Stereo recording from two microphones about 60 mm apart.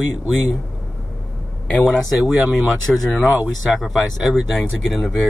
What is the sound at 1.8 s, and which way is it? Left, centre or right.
Speech, centre.